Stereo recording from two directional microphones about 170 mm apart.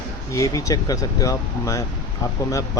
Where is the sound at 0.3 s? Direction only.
20° left (ahead or behind).